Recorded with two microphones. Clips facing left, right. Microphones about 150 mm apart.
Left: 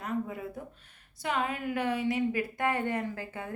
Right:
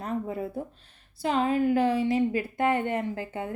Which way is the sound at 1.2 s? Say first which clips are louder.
Right 7 dB; 30° right (ahead or behind).